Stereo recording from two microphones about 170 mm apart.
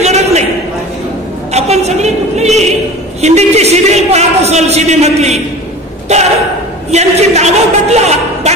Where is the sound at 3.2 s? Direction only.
40° right (ahead or behind).